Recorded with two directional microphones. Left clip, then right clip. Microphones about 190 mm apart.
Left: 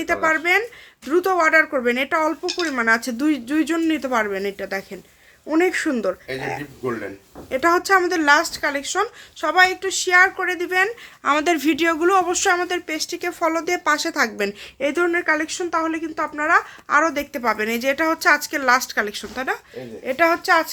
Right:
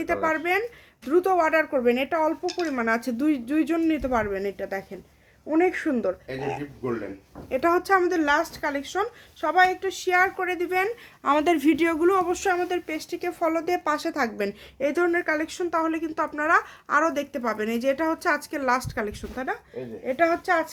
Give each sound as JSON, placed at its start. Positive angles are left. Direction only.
{"t": 0.0, "sound": "speech", "side_deg": 10}
{"t": 19.4, "sound": "speech", "side_deg": 15}